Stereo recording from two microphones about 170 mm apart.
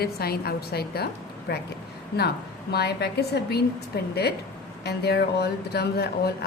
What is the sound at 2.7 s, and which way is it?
Speech, 75° left (ahead or behind).